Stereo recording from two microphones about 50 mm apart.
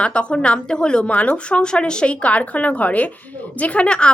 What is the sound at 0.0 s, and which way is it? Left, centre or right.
A woman's voice, left.